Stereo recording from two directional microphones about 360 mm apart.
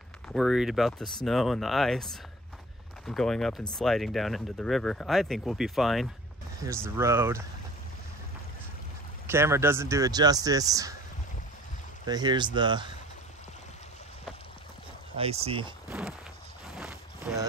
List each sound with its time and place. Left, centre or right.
0.3 s speech: centre
9.3 s speech: centre
12.1 s speech: centre
15.1 s speech: centre
16.6 s a sound: centre